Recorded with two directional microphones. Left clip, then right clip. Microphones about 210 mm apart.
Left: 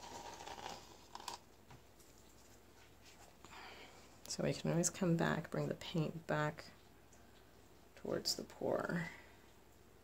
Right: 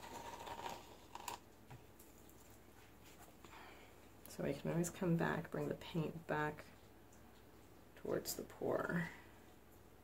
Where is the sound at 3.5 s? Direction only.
35° left (ahead or behind).